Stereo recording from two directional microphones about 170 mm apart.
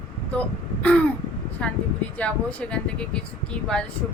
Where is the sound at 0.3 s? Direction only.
10° left (ahead or behind).